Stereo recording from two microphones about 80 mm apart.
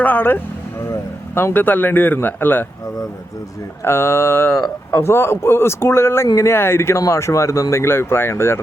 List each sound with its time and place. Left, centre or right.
0.0 s speech: left
1.5 s speech: left
3.8 s speech: left